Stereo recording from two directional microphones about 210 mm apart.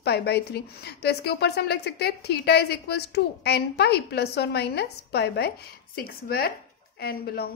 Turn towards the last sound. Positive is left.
turn(degrees=50)  # may be behind; listen again after turning